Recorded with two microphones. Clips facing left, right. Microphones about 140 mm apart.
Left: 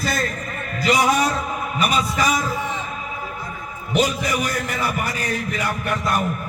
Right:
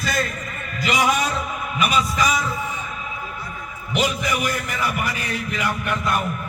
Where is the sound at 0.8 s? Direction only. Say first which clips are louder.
Left 3 dB; 35° left (ahead or behind).